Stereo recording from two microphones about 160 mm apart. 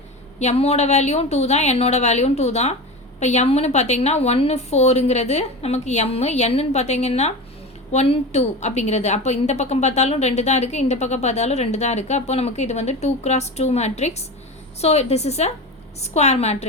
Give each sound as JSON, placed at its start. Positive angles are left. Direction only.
{"t": 0.3, "sound": "a woman's voice", "side_deg": 45}